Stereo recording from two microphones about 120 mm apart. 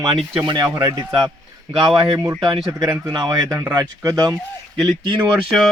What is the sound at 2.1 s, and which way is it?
Speech, 30° right (ahead or behind).